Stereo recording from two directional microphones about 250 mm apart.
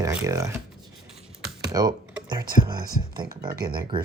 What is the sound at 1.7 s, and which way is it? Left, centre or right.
Computer keyboard, centre.